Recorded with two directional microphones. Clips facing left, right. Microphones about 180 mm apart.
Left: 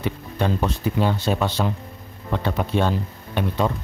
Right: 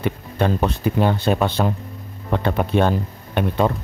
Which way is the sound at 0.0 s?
55° right (ahead or behind).